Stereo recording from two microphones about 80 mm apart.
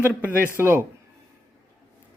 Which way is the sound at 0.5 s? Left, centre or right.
Right.